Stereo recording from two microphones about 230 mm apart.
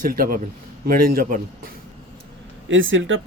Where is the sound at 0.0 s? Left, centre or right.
Right.